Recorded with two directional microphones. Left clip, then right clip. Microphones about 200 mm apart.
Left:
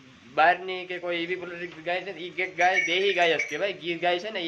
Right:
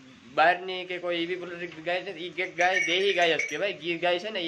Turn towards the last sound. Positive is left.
turn(degrees=-10)  # may be behind; listen again after turning